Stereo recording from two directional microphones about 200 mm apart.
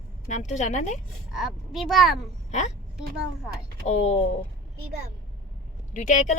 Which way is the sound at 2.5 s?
35° left (ahead or behind).